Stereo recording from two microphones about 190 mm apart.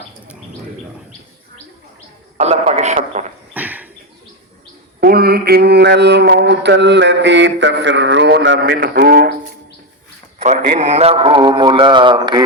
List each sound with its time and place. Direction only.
2.4 s a man's voice: 35° right (ahead or behind)
3.5 s a sound: 10° right (ahead or behind)
4.9 s speech: 55° right (ahead or behind)
10.4 s a man's voice: 35° right (ahead or behind)